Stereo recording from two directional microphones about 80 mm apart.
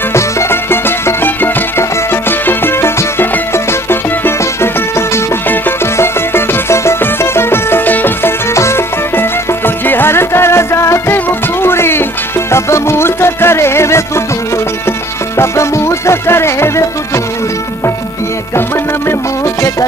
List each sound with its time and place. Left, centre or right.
0.1 s music: left
19.0 s music: left